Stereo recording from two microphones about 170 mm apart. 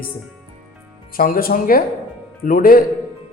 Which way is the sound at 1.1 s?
60° left (ahead or behind).